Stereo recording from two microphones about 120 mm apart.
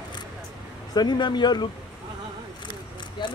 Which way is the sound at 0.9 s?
35° left (ahead or behind).